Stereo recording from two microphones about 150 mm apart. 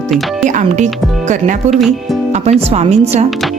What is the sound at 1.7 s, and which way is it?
Speech, centre (ahead or behind).